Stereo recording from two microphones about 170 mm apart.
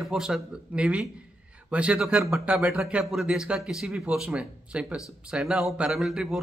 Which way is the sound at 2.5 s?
Centre (ahead or behind).